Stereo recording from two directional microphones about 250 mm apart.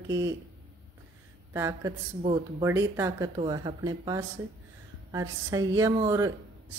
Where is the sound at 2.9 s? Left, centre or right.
Centre.